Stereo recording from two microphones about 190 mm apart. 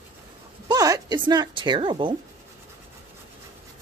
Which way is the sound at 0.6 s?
20° right (ahead or behind).